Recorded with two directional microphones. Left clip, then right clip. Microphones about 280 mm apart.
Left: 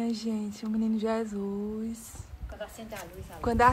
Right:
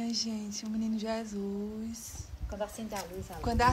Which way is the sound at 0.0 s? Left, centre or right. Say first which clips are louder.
Left 2 dB; centre.